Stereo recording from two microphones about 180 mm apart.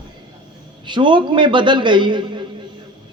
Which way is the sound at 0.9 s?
25° right (ahead or behind).